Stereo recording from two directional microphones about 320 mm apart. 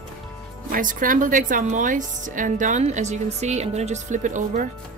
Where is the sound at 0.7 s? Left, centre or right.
Right.